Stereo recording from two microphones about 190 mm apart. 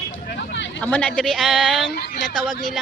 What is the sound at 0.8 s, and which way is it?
Speech, 5° left (ahead or behind).